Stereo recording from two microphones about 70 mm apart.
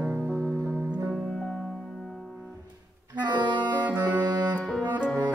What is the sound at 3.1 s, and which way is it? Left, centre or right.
Music, right.